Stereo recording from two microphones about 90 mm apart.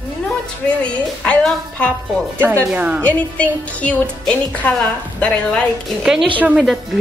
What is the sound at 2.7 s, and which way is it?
Speech, 15° right (ahead or behind).